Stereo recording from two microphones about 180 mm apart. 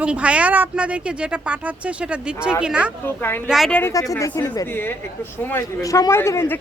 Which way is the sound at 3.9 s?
20° left (ahead or behind).